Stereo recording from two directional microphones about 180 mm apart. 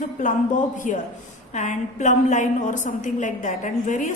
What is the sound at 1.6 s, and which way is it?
A woman's voice, 40° left (ahead or behind).